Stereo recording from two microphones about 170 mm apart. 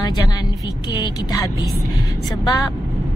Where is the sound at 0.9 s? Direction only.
20° left (ahead or behind).